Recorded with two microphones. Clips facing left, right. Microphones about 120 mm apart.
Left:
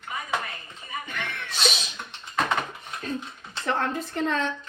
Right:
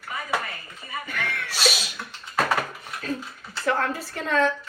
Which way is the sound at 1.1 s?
20° left (ahead or behind).